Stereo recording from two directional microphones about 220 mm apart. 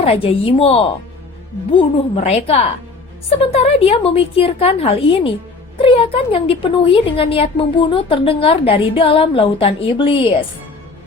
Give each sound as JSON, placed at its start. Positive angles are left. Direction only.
{"t": 0.0, "sound": "speech", "side_deg": 25}